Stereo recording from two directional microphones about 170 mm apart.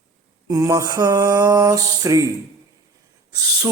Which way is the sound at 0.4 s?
20° right (ahead or behind).